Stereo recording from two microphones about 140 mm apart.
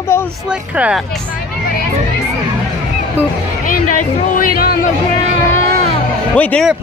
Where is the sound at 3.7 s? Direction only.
80° left.